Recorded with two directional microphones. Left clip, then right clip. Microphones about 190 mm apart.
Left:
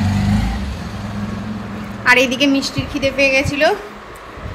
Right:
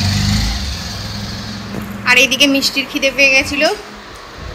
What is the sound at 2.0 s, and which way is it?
A woman's voice, 20° left (ahead or behind).